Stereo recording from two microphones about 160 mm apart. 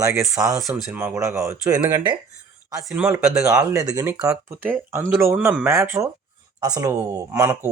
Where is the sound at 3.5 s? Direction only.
20° right (ahead or behind).